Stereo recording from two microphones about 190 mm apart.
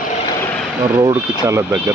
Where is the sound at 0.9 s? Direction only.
15° right (ahead or behind).